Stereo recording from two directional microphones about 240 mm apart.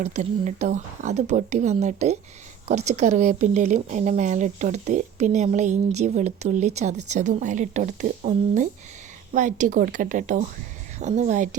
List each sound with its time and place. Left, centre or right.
0.0 s a woman's voice: right